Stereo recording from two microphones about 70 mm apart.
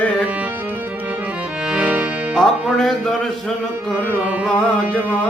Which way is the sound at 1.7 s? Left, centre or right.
Centre.